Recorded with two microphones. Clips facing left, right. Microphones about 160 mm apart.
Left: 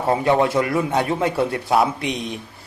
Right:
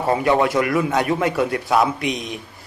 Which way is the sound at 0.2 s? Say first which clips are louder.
Even; 25° left (ahead or behind).